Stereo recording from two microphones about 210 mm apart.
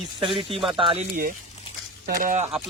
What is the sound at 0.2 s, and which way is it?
Speech, 25° right (ahead or behind).